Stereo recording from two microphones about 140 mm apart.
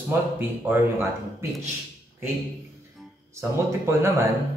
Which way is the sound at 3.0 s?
Centre (ahead or behind).